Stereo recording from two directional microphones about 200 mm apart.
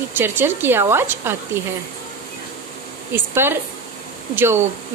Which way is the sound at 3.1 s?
10° right (ahead or behind).